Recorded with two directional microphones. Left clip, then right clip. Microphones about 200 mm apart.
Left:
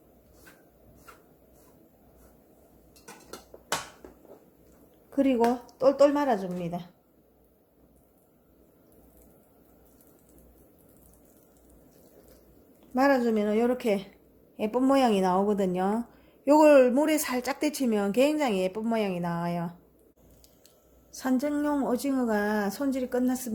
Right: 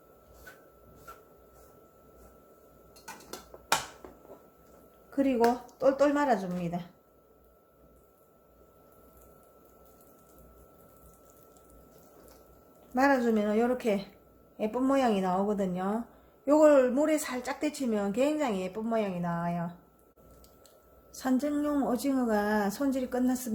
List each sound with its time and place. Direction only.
4.0 s finger snapping: 5° right (ahead or behind)
5.1 s a woman's voice: 35° left (ahead or behind)
12.9 s a woman's voice: 30° left (ahead or behind)
21.1 s a woman's voice: 25° left (ahead or behind)